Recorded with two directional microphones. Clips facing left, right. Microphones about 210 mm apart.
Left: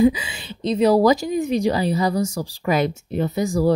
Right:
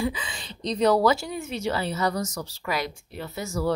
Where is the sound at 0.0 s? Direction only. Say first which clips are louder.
Left 12 dB; 10° left (ahead or behind).